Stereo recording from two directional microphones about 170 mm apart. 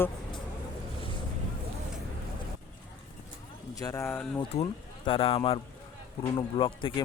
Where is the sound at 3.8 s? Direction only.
20° left (ahead or behind).